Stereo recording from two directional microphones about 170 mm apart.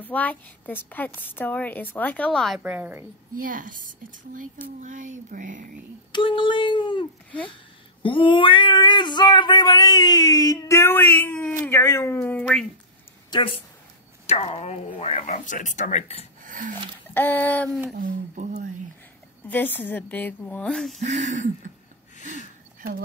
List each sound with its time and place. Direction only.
0.0 s a woman's voice: 10° left (ahead or behind)
2.6 s a woman's voice: 10° right (ahead or behind)
3.4 s speech: 55° right (ahead or behind)
6.1 s speech: 30° left (ahead or behind)
8.0 s cat: 30° left (ahead or behind); by 11.5 s 10° left (ahead or behind)
11.6 s a woman's voice: 15° left (ahead or behind)
13.3 s speech: 30° left (ahead or behind)
16.4 s a sound: 50° right (ahead or behind)
17.1 s a woman's voice: 10° left (ahead or behind)
17.9 s speech: 50° right (ahead or behind)
19.4 s a woman's voice: 10° left (ahead or behind)
21.0 s speech: 45° right (ahead or behind)
22.8 s speech: 60° right (ahead or behind)